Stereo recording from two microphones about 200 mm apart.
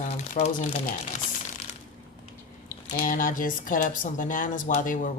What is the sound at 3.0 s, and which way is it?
Speech, 40° left (ahead or behind).